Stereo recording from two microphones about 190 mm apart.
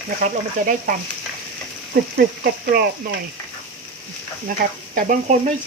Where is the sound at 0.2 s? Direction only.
45° right (ahead or behind).